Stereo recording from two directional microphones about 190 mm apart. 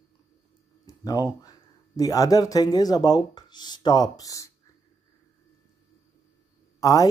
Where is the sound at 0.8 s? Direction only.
20° left (ahead or behind).